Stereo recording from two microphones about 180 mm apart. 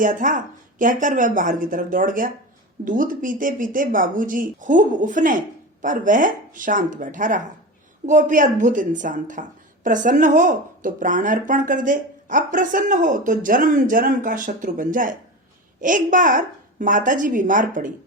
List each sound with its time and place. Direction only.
0.0 s speech: 45° right (ahead or behind)